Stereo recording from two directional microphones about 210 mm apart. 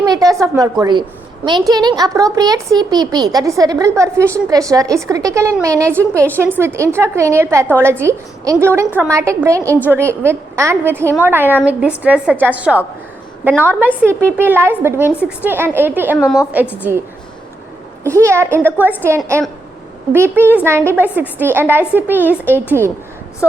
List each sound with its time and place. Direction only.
0.0 s a woman's voice: 15° right (ahead or behind); by 16.4 s centre (ahead or behind)
18.0 s a woman's voice: 10° right (ahead or behind)